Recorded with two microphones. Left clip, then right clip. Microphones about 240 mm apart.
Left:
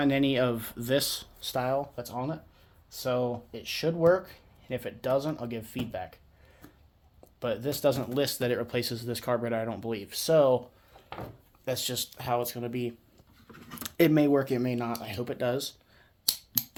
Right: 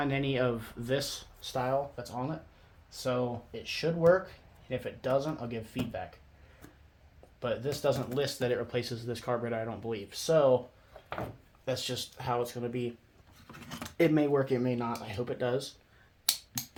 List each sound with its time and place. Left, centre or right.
0.0 s speech: left
7.3 s speech: left
11.6 s speech: left